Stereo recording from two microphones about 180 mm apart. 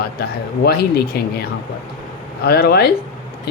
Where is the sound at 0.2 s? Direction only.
60° left (ahead or behind).